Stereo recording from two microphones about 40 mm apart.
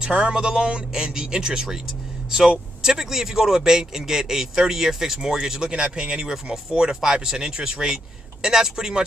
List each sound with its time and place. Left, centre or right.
0.0 s speech: right
2.8 s speech: centre